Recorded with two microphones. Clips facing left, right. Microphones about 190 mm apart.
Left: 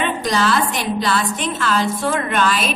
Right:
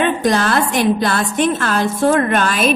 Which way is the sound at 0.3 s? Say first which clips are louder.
Right 3 dB; 55° right (ahead or behind).